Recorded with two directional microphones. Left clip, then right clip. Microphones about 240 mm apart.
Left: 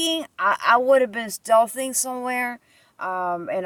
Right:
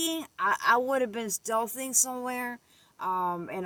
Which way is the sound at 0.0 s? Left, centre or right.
Centre.